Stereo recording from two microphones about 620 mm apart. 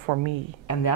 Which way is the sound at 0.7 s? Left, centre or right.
Left.